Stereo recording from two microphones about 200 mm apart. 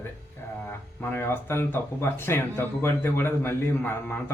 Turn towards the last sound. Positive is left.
turn(degrees=10)  # may be behind; listen again after turning